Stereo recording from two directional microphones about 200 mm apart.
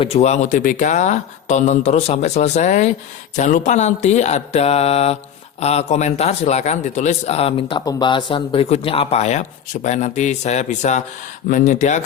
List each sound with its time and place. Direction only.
0.0 s a man's voice: 30° left (ahead or behind)